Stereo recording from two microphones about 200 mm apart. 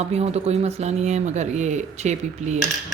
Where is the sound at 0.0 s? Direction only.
30° right (ahead or behind).